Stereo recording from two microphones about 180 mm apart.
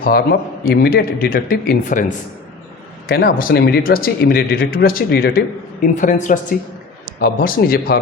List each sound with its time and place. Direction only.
0.0 s speech: 60° left (ahead or behind)
3.1 s speech: 55° left (ahead or behind)
5.8 s speech: 45° left (ahead or behind)